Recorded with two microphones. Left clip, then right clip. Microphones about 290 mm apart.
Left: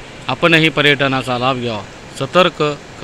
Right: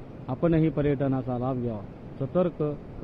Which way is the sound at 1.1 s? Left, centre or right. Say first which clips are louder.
Left 13 dB; left.